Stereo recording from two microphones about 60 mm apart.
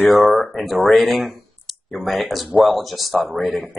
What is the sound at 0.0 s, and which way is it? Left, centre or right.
Speech, left.